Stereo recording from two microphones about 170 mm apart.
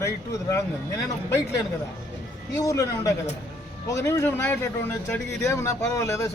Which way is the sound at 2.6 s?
20° left (ahead or behind).